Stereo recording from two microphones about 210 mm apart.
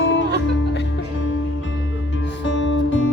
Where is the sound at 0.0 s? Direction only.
60° left (ahead or behind).